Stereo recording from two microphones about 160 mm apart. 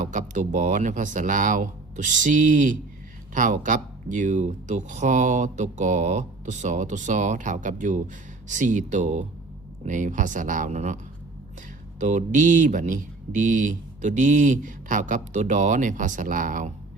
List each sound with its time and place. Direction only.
0.1 s speech: 50° right (ahead or behind)